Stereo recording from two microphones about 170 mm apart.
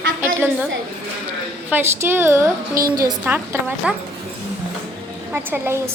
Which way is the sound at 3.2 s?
10° right (ahead or behind).